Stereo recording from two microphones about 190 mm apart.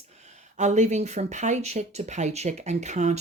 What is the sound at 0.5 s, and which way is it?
Speech, 40° right (ahead or behind).